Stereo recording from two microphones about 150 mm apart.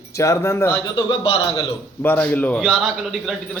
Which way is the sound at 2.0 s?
10° left (ahead or behind).